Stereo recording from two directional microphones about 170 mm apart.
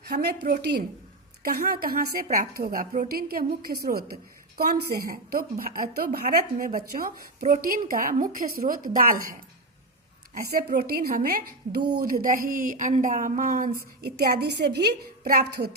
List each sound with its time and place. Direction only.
0.0 s a woman's voice: 70° right (ahead or behind); by 9.3 s 55° right (ahead or behind)
10.3 s a woman's voice: 65° right (ahead or behind)